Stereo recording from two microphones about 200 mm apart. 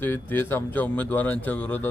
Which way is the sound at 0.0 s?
10° left (ahead or behind).